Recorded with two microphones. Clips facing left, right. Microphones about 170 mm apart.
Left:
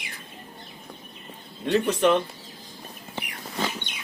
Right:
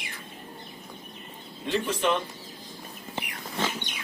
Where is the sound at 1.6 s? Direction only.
65° left (ahead or behind).